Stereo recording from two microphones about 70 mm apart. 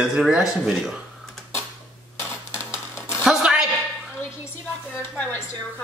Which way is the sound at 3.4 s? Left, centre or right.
Centre.